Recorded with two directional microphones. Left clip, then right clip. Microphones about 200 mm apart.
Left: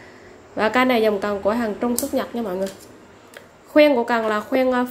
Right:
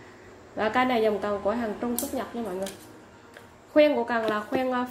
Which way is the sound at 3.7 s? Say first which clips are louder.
Left 6 dB; 20° left (ahead or behind).